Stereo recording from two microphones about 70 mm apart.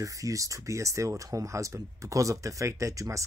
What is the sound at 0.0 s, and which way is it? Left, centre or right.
Speech, right.